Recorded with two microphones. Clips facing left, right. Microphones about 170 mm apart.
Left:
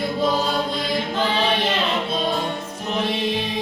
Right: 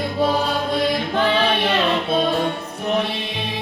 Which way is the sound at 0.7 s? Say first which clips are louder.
Right 4 dB; 60° right (ahead or behind).